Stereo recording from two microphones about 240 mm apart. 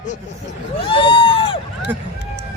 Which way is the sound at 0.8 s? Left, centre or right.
Left.